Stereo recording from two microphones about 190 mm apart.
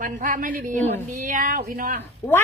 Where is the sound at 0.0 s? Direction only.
45° right (ahead or behind).